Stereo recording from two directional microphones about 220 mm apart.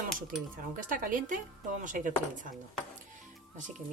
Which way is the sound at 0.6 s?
40° right (ahead or behind).